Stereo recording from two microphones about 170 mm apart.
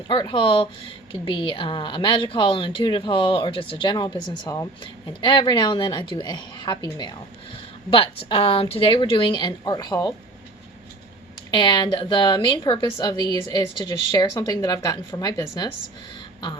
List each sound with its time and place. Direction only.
0.1 s a woman's voice: 30° left (ahead or behind)
11.5 s speech: 25° left (ahead or behind)